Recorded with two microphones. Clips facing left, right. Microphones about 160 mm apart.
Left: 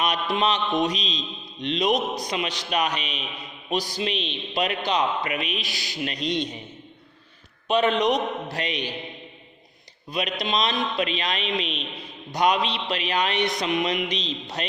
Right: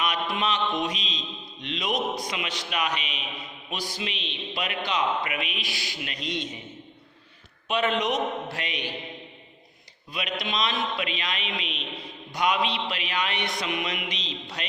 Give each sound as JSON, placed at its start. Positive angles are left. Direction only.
{"t": 0.0, "sound": "a man's voice", "side_deg": 40}
{"t": 6.2, "sound": "a man's voice", "side_deg": -5}
{"t": 7.7, "sound": "a man's voice", "side_deg": 35}
{"t": 10.1, "sound": "a man's voice", "side_deg": 40}